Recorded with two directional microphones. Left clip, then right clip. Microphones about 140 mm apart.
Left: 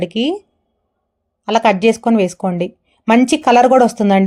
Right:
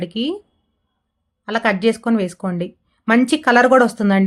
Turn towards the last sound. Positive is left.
turn(degrees=15)  # may be behind; listen again after turning